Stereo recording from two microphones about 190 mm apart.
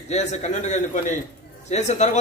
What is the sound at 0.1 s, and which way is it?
A man's voice, 35° left (ahead or behind).